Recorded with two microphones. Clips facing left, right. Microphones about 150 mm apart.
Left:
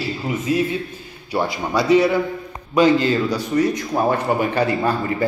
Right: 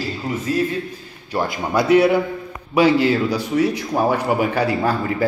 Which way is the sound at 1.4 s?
55° right (ahead or behind).